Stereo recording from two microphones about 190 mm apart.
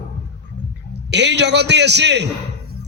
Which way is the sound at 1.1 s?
65° right (ahead or behind).